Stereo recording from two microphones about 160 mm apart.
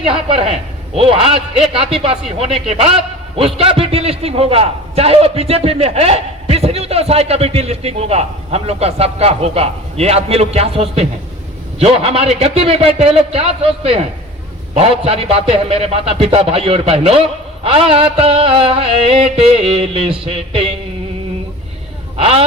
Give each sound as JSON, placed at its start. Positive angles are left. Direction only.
{"t": 0.0, "sound": "a man's voice", "side_deg": -35}
{"t": 22.2, "sound": "a man's voice", "side_deg": -40}